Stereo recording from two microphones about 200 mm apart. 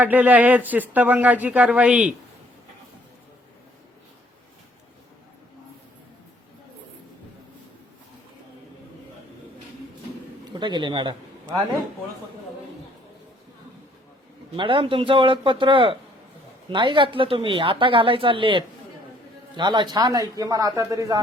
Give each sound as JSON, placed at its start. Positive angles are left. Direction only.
{"t": 0.0, "sound": "speech", "side_deg": -10}
{"t": 10.5, "sound": "a woman's voice", "side_deg": -25}
{"t": 14.5, "sound": "a woman's voice", "side_deg": -25}